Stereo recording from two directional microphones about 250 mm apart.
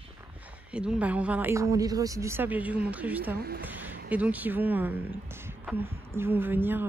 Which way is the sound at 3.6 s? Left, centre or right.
Centre.